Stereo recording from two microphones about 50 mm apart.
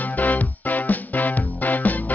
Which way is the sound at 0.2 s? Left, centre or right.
Left.